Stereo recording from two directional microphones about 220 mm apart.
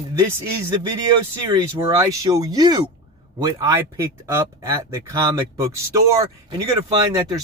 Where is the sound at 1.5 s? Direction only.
15° right (ahead or behind).